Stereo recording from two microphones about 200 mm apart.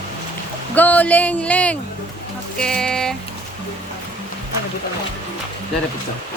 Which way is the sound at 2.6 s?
5° left (ahead or behind).